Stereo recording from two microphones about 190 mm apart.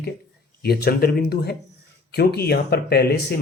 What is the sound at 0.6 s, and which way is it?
Speech, 55° left (ahead or behind).